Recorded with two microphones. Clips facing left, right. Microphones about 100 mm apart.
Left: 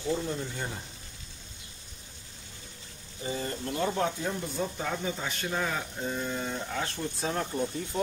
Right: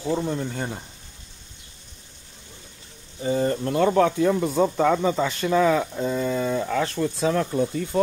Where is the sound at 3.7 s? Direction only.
90° right.